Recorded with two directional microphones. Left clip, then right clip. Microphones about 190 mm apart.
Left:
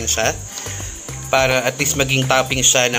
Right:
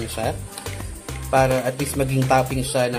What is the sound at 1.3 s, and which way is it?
A man's voice, centre (ahead or behind).